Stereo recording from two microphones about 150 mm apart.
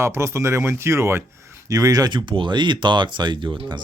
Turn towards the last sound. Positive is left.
turn(degrees=-35)  # may be behind; listen again after turning